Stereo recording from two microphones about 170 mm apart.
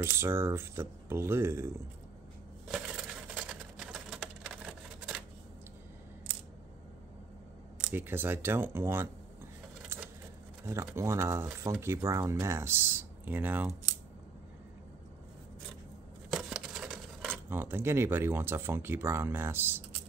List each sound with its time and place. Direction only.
0.0 s speech: 15° right (ahead or behind)
2.7 s a sound: 5° right (ahead or behind)
7.9 s speech: 10° right (ahead or behind)
10.6 s speech: 15° right (ahead or behind)
16.3 s scissors: centre (ahead or behind)
17.5 s speech: 15° right (ahead or behind)